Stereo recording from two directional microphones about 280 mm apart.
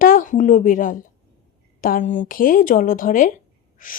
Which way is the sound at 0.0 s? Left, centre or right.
Left.